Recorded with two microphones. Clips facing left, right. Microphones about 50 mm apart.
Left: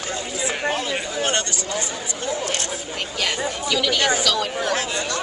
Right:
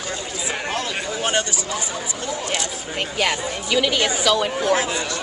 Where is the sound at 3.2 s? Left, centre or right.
Right.